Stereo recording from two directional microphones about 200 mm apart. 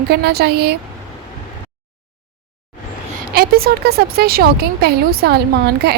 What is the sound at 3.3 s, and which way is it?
Speech, 50° right (ahead or behind).